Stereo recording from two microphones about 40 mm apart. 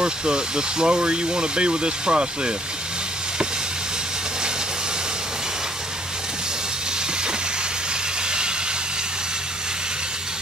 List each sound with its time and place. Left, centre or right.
0.0 s speech: right